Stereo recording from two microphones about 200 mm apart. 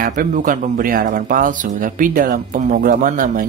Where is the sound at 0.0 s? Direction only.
40° right (ahead or behind).